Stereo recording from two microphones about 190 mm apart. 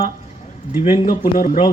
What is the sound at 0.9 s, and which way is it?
Speech, 40° left (ahead or behind).